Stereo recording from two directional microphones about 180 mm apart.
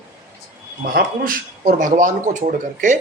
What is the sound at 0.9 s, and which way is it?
Speech, 55° right (ahead or behind).